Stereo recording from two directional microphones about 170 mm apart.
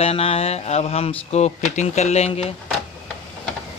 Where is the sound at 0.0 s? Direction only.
35° left (ahead or behind).